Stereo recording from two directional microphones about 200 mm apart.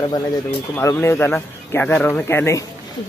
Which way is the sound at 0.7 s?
10° left (ahead or behind).